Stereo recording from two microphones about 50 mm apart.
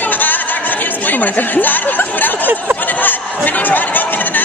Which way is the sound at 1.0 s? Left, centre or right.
Left.